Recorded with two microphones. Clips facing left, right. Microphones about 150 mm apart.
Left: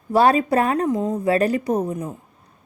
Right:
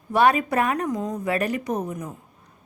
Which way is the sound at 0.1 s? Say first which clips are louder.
Left 3 dB; 30° left (ahead or behind).